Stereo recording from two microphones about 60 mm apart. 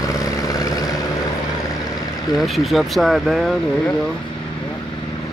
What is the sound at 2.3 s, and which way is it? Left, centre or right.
Speech, centre.